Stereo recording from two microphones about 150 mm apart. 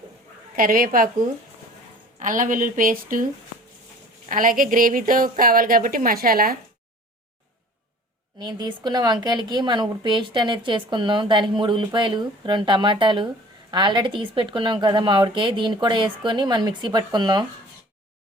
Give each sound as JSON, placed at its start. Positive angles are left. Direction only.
{"t": 0.5, "sound": "a woman's voice", "side_deg": -65}
{"t": 2.1, "sound": "a woman's voice", "side_deg": -60}
{"t": 4.3, "sound": "a woman's voice", "side_deg": -65}
{"t": 8.4, "sound": "a woman's voice", "side_deg": -30}